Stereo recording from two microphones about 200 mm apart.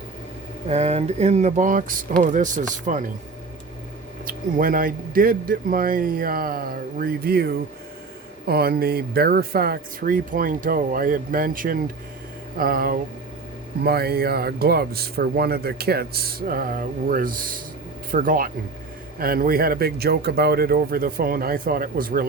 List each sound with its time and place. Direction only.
0.7 s vehicle: 35° right (ahead or behind)
2.9 s speech: 45° right (ahead or behind)
4.3 s speech: 45° right (ahead or behind)